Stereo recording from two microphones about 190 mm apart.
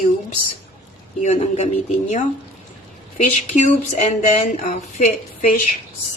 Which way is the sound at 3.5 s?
40° left (ahead or behind).